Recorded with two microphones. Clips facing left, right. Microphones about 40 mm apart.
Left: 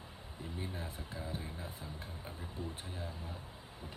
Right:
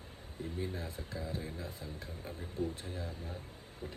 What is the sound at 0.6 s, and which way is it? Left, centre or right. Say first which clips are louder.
Speech: right 3 dB; left.